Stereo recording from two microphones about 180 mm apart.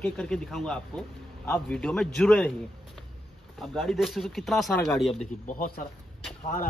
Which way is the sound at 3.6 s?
Centre (ahead or behind).